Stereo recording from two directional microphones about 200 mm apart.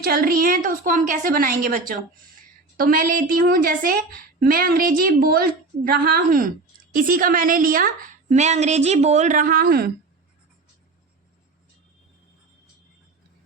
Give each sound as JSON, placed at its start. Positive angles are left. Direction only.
{"t": 0.0, "sound": "a woman's voice", "side_deg": -50}